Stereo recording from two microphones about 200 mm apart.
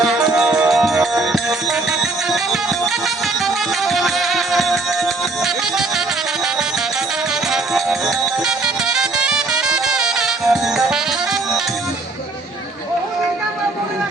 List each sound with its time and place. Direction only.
0.0 s music: centre (ahead or behind)
7.5 s music: centre (ahead or behind)